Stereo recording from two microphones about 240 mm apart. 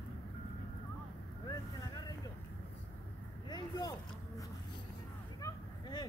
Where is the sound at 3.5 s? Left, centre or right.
Centre.